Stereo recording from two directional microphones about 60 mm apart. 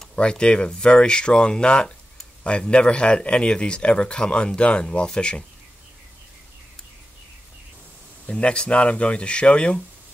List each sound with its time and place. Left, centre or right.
0.1 s speech: centre
8.3 s speech: centre